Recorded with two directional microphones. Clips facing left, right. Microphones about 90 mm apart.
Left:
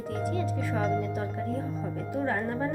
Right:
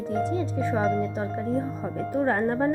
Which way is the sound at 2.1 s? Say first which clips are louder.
Right 6 dB; 45° right (ahead or behind).